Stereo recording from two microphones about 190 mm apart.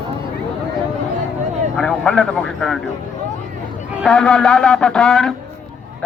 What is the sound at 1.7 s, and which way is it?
A man's voice, 5° left (ahead or behind).